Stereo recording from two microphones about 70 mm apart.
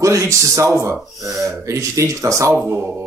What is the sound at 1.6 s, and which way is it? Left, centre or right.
Speech, right.